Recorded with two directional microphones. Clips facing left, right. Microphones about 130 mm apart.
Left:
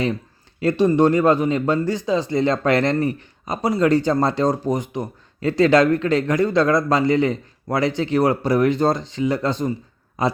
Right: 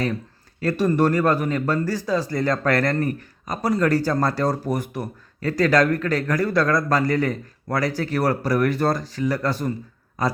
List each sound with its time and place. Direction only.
0.6 s speech: 20° left (ahead or behind)